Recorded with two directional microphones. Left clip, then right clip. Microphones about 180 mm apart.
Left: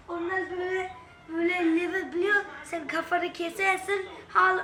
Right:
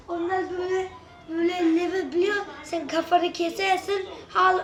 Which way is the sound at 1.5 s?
30° right (ahead or behind).